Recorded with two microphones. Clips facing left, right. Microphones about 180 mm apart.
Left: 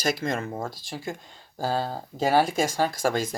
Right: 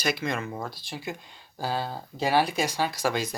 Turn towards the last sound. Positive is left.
turn(degrees=50)  # may be behind; listen again after turning